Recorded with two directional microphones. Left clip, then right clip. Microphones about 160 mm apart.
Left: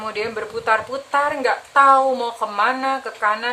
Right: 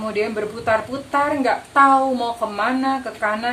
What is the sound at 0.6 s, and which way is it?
A woman's voice, 20° left (ahead or behind).